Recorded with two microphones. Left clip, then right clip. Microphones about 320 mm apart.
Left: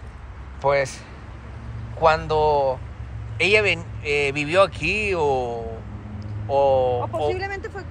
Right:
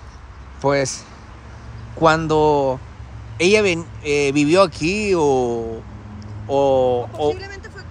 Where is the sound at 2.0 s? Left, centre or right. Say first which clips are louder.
Right 3 dB; right.